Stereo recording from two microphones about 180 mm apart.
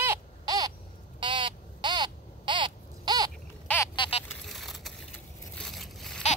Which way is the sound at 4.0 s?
30° left (ahead or behind).